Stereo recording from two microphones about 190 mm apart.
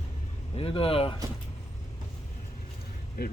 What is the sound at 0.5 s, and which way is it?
Speech, 30° left (ahead or behind).